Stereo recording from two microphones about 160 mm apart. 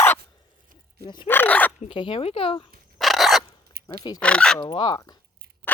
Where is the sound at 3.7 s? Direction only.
80° right.